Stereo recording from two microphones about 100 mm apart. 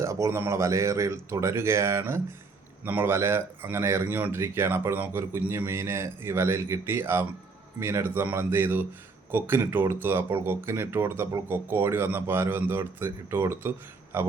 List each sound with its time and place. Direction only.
0.0 s speech: 30° right (ahead or behind)